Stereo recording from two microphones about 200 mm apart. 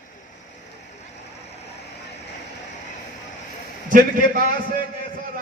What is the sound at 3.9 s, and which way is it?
Speech, 45° right (ahead or behind).